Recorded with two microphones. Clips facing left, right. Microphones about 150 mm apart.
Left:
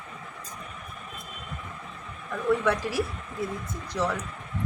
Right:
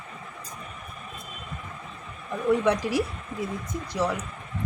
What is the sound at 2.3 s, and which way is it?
A woman's voice, 20° right (ahead or behind).